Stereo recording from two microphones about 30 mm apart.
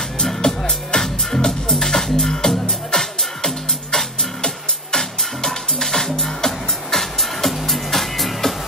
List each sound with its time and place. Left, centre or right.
0.5 s music: centre